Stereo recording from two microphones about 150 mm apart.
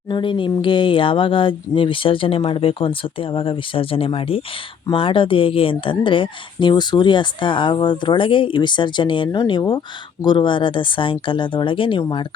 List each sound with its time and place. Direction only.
0.1 s speech: 35° left (ahead or behind)